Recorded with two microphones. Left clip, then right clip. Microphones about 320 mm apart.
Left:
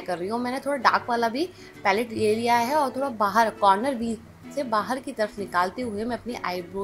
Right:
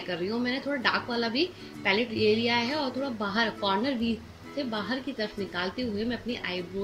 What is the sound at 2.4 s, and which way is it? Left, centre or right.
A woman's voice, centre.